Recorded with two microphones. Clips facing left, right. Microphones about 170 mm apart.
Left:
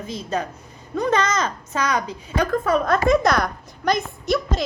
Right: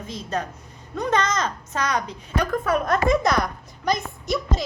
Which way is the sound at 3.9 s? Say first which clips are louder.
Left 3 dB; 80° left.